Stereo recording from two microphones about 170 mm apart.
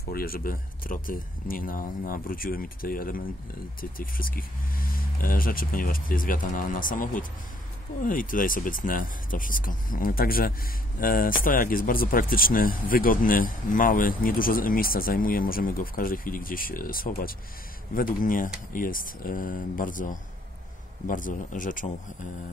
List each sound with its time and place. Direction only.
0.1 s speech: 60° left (ahead or behind)